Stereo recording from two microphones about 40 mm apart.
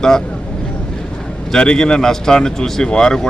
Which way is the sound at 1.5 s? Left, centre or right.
Left.